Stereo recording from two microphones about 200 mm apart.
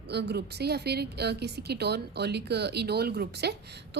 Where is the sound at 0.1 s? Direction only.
55° right (ahead or behind).